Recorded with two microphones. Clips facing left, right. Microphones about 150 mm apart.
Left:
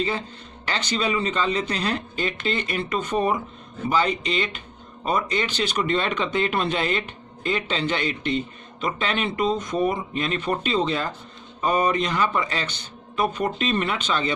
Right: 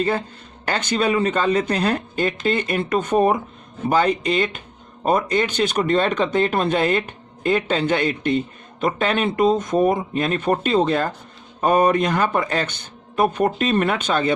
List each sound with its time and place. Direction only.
0.0 s speech: 50° right (ahead or behind)